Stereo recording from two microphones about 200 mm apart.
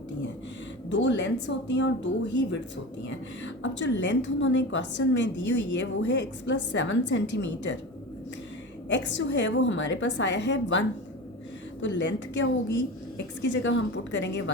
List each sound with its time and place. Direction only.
0.9 s a woman's voice: 65° left (ahead or behind)
8.9 s a woman's voice: 65° left (ahead or behind)